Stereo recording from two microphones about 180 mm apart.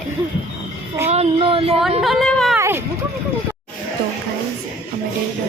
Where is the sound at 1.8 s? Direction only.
Centre (ahead or behind).